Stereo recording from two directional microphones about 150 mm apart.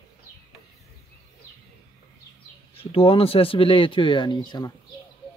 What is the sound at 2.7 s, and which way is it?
Speech, 40° left (ahead or behind).